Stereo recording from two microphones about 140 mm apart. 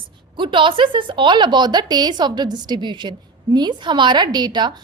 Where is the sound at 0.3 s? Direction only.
35° right (ahead or behind).